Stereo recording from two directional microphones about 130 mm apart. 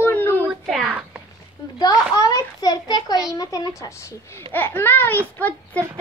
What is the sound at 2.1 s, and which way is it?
A child's voice, 30° left (ahead or behind).